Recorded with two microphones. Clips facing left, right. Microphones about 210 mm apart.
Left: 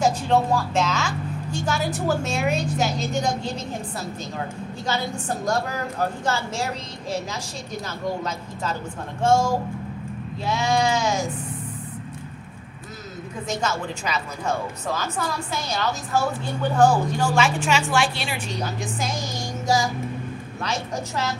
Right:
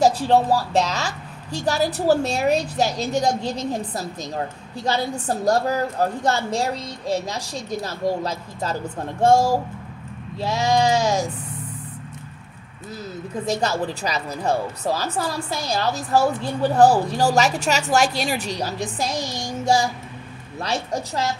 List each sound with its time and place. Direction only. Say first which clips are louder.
0.0 s a woman's voice: right 3 dB; 35° right (ahead or behind)
4.8 s a woman's voice: right 4 dB; 35° right (ahead or behind)
8.0 s a woman's voice: right 4 dB; 35° right (ahead or behind)
13.5 s a woman's voice: right 4 dB; 35° right (ahead or behind)
20.6 s a woman's voice: right 3 dB; 35° right (ahead or behind)